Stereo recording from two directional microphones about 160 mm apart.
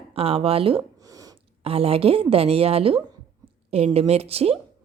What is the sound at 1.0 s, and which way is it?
Plop, 20° right (ahead or behind).